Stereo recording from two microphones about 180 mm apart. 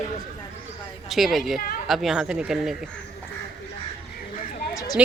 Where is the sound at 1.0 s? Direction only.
Centre (ahead or behind).